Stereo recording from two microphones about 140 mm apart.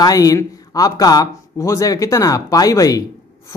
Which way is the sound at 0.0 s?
25° left (ahead or behind).